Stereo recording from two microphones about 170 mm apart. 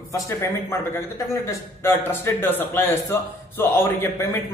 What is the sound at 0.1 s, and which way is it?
A man's voice, 15° left (ahead or behind).